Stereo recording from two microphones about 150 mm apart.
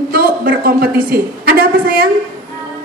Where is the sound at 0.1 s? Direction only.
85° right.